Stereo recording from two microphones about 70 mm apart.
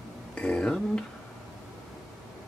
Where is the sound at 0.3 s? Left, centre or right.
Centre.